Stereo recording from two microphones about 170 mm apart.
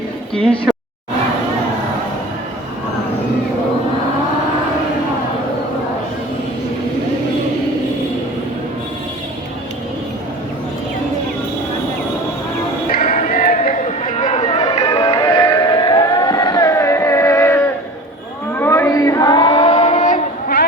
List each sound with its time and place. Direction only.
12.9 s music: 60° left (ahead or behind)
13.2 s a sound: 55° left (ahead or behind)
13.7 s run: 45° left (ahead or behind)
14.6 s music: 20° left (ahead or behind)
18.5 s a sound: 15° left (ahead or behind); by 19.8 s 30° left (ahead or behind)
19.8 s child singing: 45° left (ahead or behind)